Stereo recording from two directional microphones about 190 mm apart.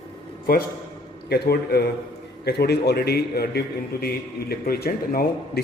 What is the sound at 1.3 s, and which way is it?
A man's voice, 60° left (ahead or behind).